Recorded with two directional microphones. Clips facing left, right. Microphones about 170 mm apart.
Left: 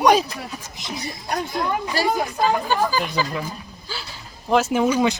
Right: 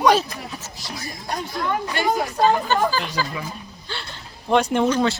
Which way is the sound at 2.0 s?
35° left (ahead or behind).